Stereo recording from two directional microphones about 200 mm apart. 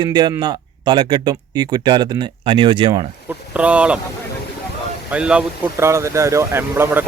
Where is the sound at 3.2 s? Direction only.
5° right (ahead or behind).